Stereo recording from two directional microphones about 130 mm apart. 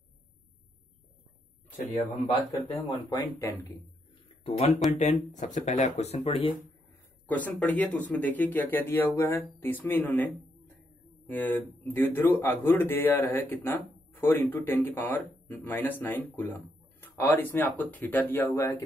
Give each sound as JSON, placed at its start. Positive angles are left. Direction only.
{"t": 3.1, "sound": "speech", "side_deg": 25}
{"t": 4.4, "sound": "speech", "side_deg": 50}
{"t": 4.9, "sound": "speech", "side_deg": 70}
{"t": 7.2, "sound": "speech", "side_deg": 10}